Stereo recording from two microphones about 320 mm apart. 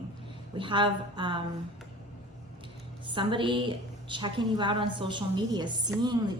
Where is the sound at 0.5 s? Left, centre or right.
Centre.